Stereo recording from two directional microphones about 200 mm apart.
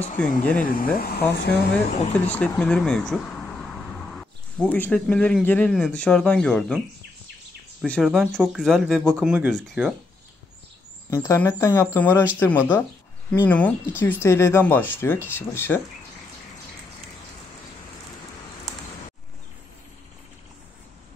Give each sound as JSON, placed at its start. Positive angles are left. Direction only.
{"t": 0.2, "sound": "speech", "side_deg": 10}
{"t": 0.7, "sound": "speech", "side_deg": 45}
{"t": 2.2, "sound": "speech", "side_deg": 5}
{"t": 4.2, "sound": "speech", "side_deg": 10}
{"t": 7.8, "sound": "speech", "side_deg": 0}
{"t": 11.1, "sound": "speech", "side_deg": 10}